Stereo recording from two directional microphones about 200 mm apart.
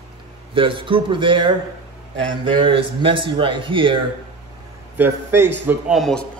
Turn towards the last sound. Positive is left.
turn(degrees=0)  # may be behind; listen again after turning